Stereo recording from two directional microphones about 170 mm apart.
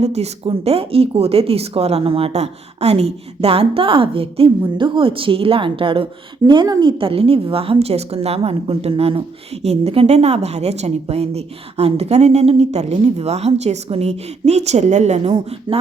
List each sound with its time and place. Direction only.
0.0 s a woman's voice: 40° right (ahead or behind)